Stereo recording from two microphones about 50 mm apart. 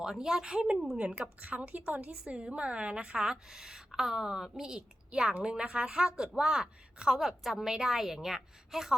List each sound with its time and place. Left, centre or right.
0.0 s a woman's voice: centre
0.9 s a woman's voice: right; by 9.0 s centre